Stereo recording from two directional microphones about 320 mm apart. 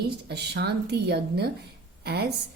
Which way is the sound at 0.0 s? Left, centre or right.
Right.